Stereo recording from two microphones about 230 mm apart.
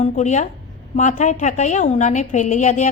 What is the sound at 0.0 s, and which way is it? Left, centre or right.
A woman's voice, left.